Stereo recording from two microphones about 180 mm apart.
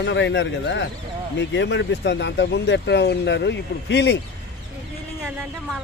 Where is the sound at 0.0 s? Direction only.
80° left.